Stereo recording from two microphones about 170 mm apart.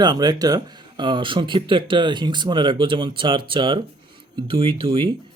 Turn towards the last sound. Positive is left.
turn(degrees=-30)  # may be behind; listen again after turning